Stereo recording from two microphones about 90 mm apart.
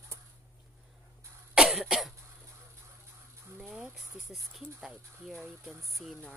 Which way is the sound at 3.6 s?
5° right (ahead or behind).